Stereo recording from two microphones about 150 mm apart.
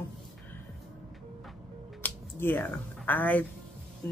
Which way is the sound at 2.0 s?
15° left (ahead or behind).